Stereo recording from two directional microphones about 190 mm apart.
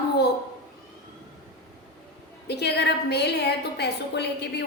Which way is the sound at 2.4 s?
60° left (ahead or behind).